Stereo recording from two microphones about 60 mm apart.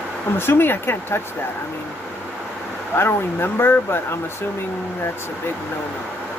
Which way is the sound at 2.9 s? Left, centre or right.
Left.